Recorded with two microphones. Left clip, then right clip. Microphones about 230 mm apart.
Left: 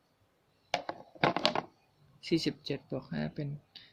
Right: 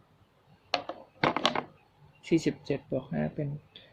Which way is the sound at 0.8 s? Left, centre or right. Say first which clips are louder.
Left 1 dB; left.